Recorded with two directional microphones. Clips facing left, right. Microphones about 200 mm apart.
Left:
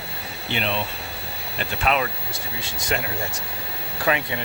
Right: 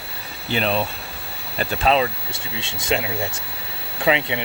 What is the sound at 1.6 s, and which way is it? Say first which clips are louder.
Speech: right 5 dB; 30° right (ahead or behind).